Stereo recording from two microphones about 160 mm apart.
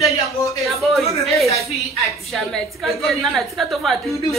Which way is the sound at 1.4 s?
20° left (ahead or behind).